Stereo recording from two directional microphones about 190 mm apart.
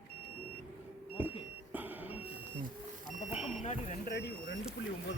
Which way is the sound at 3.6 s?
35° left (ahead or behind).